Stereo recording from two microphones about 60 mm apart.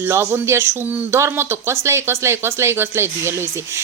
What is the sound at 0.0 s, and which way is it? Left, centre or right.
Speech, right.